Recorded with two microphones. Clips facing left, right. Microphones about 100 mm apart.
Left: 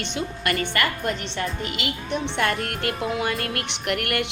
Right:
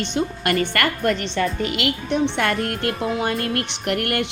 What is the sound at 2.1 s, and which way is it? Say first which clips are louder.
Speech: right 3 dB; 50° right (ahead or behind).